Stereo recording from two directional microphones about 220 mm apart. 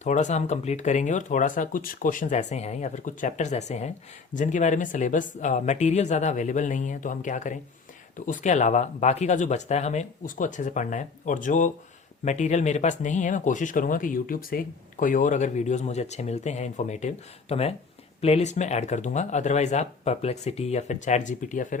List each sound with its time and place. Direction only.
0.0 s speech: 35° left (ahead or behind)